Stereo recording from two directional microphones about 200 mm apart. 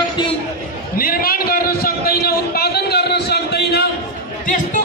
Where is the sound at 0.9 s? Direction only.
45° left (ahead or behind).